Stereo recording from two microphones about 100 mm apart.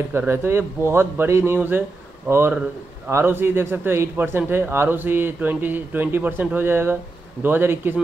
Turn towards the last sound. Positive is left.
turn(degrees=-20)  # may be behind; listen again after turning